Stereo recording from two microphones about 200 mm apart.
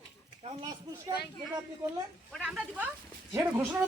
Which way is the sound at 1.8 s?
10° right (ahead or behind).